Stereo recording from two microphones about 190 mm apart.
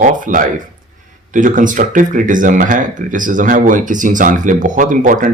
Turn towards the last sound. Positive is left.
turn(degrees=-45)  # may be behind; listen again after turning